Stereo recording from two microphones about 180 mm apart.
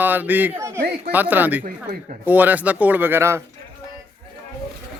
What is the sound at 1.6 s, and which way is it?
Speech, 45° right (ahead or behind).